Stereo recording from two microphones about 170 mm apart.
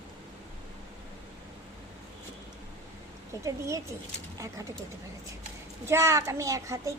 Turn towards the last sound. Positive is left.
turn(degrees=-20)  # may be behind; listen again after turning